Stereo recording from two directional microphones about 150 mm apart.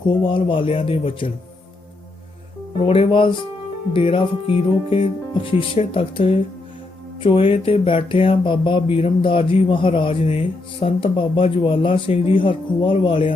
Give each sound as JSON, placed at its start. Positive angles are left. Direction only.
{"t": 0.3, "sound": "speech", "side_deg": 35}
{"t": 2.8, "sound": "speech", "side_deg": 35}